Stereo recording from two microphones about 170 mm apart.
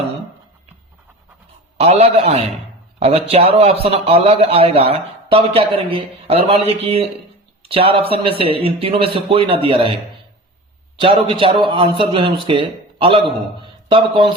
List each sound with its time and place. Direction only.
1.8 s a man's voice: 40° right (ahead or behind)
11.0 s a man's voice: 30° right (ahead or behind)
13.6 s a sound: 30° right (ahead or behind)